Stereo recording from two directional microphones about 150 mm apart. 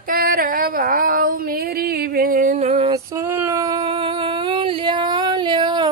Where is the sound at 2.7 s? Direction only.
40° right (ahead or behind).